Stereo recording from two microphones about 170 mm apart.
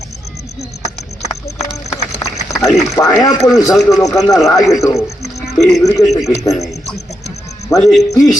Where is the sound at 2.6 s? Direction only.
Centre (ahead or behind).